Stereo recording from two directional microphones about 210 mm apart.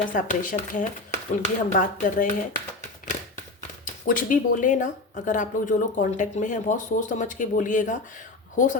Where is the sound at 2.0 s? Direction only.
40° left (ahead or behind).